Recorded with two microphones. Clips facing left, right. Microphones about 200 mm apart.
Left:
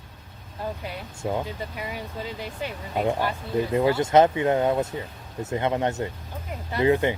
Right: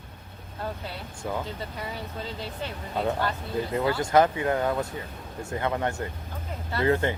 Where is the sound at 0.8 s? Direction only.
25° left (ahead or behind).